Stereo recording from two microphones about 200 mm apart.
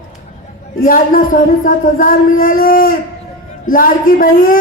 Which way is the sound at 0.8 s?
45° left (ahead or behind).